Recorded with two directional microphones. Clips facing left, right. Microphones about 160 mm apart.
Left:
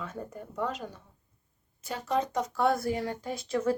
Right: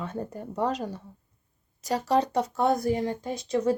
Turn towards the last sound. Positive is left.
turn(degrees=-20)  # may be behind; listen again after turning